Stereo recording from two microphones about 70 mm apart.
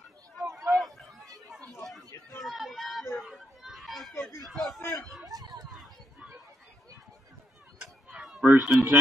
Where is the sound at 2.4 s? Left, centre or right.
Centre.